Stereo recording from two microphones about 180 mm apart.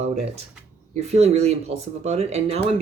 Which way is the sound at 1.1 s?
35° right (ahead or behind).